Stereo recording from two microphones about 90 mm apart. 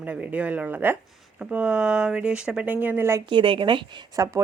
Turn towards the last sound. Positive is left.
turn(degrees=-40)  # may be behind; listen again after turning